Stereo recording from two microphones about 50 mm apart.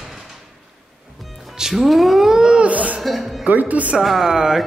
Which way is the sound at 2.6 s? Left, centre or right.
Right.